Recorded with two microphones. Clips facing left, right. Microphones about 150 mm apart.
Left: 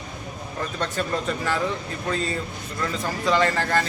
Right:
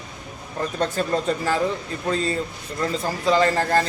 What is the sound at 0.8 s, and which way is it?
Speech, 35° right (ahead or behind).